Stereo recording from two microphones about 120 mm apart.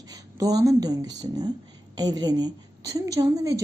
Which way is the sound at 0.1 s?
30° right (ahead or behind).